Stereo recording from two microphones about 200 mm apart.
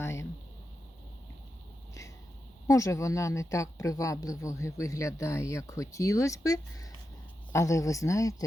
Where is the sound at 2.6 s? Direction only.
15° left (ahead or behind).